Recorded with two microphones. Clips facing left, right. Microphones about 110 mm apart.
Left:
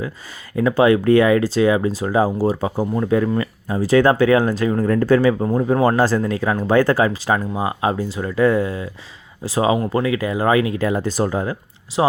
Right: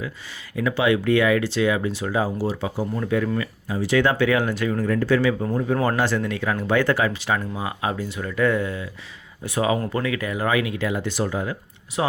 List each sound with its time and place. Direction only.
0.5 s speech: 40° left (ahead or behind)
12.0 s speech: 25° left (ahead or behind)